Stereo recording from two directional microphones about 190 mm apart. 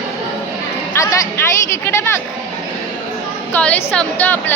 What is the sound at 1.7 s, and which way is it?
Speech, 15° left (ahead or behind).